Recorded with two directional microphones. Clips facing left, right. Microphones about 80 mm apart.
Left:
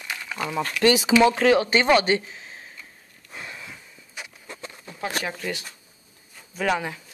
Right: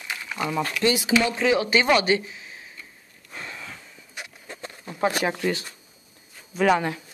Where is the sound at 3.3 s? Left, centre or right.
Centre.